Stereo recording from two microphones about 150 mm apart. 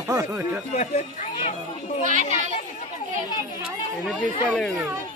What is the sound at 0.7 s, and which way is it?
Speech, 55° left (ahead or behind).